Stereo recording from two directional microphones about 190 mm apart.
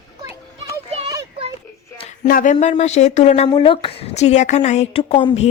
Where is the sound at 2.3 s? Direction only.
45° left (ahead or behind).